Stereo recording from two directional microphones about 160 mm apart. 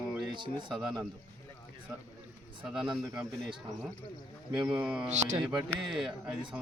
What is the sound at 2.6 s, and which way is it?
Speech, 5° right (ahead or behind).